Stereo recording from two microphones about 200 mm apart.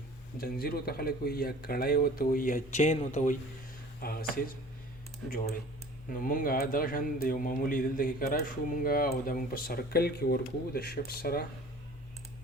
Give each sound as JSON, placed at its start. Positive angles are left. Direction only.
{"t": 0.3, "sound": "speech", "side_deg": 50}
{"t": 4.0, "sound": "speech", "side_deg": 50}
{"t": 6.1, "sound": "speech", "side_deg": 45}